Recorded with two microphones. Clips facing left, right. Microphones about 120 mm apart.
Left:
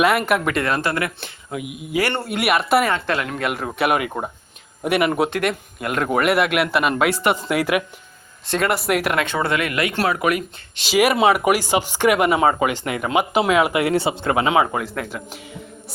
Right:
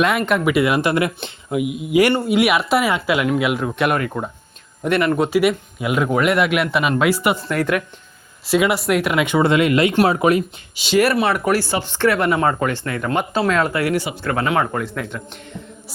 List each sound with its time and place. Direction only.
0.0 s speech: 5° left (ahead or behind)
0.4 s speech: 10° right (ahead or behind)
2.1 s speech: centre (ahead or behind)
2.9 s speech: 15° right (ahead or behind)
3.4 s speech: centre (ahead or behind)
5.3 s speech: 5° right (ahead or behind)
7.4 s speech: 10° left (ahead or behind)
8.4 s speech: 5° right (ahead or behind)
9.2 s speech: 15° right (ahead or behind)
10.8 s speech: centre (ahead or behind)
11.0 s speech: 15° left (ahead or behind)
13.8 s speech: 25° left (ahead or behind)
14.7 s speech: 5° left (ahead or behind)